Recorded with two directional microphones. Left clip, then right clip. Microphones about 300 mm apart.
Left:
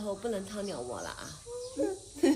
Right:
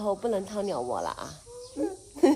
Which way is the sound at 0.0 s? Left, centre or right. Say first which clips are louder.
Right 7 dB; right.